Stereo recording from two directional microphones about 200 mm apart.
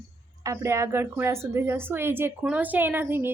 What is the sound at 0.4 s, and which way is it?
A woman's voice, 15° right (ahead or behind).